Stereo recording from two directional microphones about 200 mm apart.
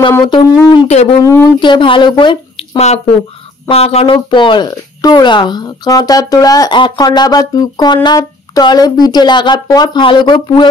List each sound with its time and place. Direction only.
0.1 s speech: 25° left (ahead or behind)
1.2 s speech: 15° left (ahead or behind)